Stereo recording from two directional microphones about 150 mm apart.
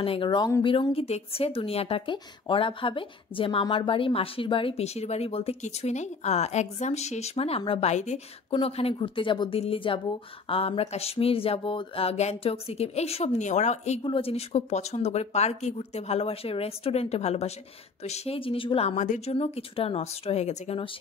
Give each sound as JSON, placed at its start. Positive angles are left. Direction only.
{"t": 0.0, "sound": "a woman's voice", "side_deg": 35}
{"t": 7.9, "sound": "a woman's voice", "side_deg": 50}
{"t": 14.0, "sound": "a woman's voice", "side_deg": 35}
{"t": 18.9, "sound": "speech", "side_deg": 55}